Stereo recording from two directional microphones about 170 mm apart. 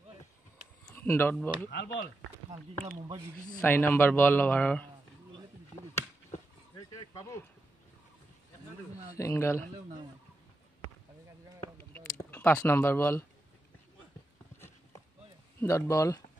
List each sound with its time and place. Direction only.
0.9 s a man's voice: 15° left (ahead or behind)
2.5 s speech: 35° right (ahead or behind)
3.6 s a man's voice: 10° left (ahead or behind)
6.9 s speech: 20° left (ahead or behind)
9.1 s a man's voice: 15° left (ahead or behind)
11.8 s a sound: 10° left (ahead or behind)
15.6 s a man's voice: 15° left (ahead or behind)